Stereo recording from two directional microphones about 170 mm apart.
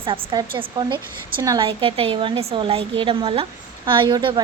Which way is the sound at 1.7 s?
30° right (ahead or behind).